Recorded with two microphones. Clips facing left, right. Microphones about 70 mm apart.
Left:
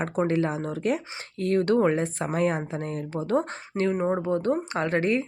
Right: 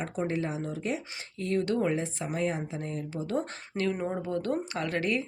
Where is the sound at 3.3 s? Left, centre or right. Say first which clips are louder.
Left 6 dB; left.